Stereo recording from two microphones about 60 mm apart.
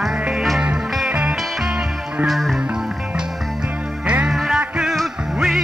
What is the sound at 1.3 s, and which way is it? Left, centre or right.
Music, centre.